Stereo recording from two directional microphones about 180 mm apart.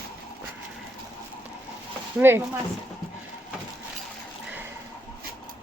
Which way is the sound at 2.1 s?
15° right (ahead or behind).